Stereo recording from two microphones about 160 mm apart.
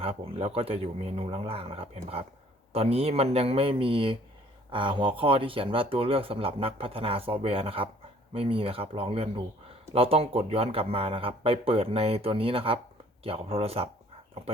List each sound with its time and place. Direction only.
0.0 s speech: 40° right (ahead or behind)